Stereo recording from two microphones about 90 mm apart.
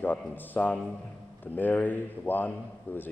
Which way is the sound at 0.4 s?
20° left (ahead or behind).